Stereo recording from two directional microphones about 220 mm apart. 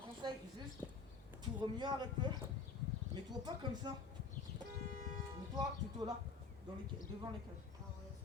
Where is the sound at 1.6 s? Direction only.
20° right (ahead or behind).